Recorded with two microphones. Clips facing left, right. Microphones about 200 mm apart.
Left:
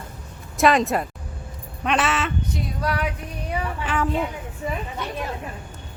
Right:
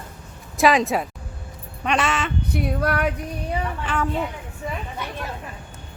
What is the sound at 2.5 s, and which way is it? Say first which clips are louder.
Female singing: right 4 dB; 60° right (ahead or behind).